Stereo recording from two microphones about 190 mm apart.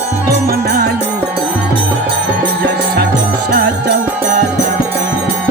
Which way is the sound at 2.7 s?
60° right (ahead or behind).